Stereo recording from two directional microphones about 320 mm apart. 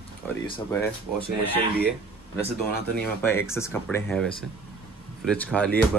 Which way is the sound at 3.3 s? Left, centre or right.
Centre.